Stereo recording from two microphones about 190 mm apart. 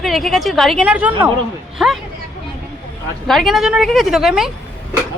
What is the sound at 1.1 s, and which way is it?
Speech, 25° right (ahead or behind).